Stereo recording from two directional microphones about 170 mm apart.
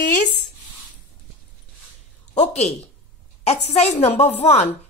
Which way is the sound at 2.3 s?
40° left (ahead or behind).